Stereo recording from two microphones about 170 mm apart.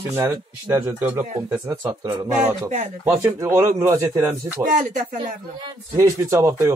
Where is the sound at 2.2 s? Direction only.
10° right (ahead or behind).